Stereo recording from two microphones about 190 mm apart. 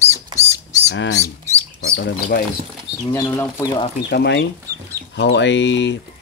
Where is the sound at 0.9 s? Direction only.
65° left (ahead or behind).